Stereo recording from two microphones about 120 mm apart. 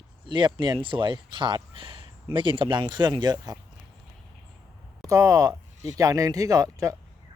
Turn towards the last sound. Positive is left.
turn(degrees=-30)  # may be behind; listen again after turning